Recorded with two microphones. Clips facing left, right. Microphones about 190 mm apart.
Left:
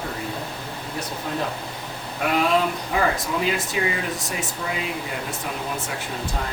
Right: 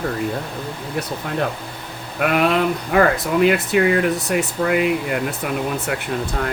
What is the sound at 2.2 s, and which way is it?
Speech, 65° right (ahead or behind).